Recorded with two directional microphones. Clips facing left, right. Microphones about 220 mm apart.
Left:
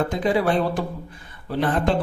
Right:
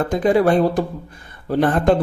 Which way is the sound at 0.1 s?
50° right (ahead or behind).